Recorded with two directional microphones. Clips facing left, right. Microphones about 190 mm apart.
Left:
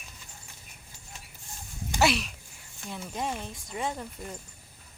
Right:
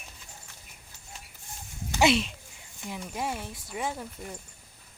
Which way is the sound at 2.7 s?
15° right (ahead or behind).